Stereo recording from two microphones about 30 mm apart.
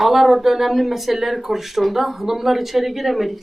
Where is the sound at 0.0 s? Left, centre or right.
Centre.